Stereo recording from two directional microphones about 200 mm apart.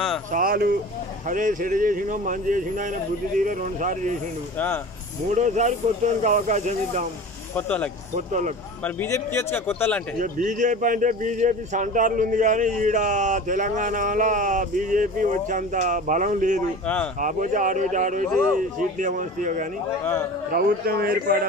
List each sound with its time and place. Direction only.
0.3 s speech: 45° right (ahead or behind)
5.3 s speech: 35° right (ahead or behind)
7.5 s speech: 5° left (ahead or behind)
8.3 s speech: 35° right (ahead or behind)
8.8 s speech: 15° left (ahead or behind)
10.1 s speech: 40° right (ahead or behind)
16.8 s speech: 5° left (ahead or behind)
17.2 s speech: 40° right (ahead or behind)